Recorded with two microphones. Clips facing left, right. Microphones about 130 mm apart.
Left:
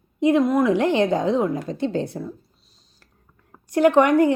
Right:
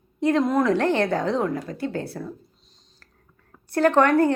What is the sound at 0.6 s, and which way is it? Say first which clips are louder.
A woman's voice: left 2 dB; 15° left (ahead or behind).